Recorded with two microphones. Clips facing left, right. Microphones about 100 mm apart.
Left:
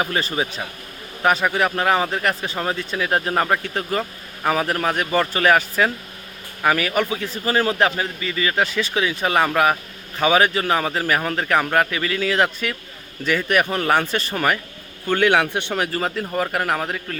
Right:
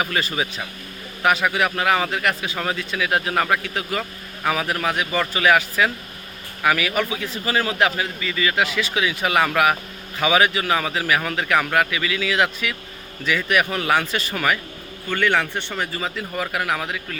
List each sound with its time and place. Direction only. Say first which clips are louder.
0.0 s speech: left 1 dB; 30° left (ahead or behind)
15.0 s speech: left 4 dB; 55° left (ahead or behind); by 17.2 s 40° left (ahead or behind)